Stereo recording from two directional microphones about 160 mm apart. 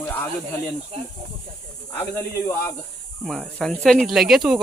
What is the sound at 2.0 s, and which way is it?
Speech, 15° left (ahead or behind).